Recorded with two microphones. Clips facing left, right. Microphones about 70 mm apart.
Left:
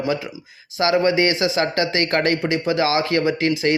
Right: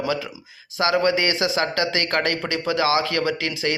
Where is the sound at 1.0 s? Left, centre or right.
Left.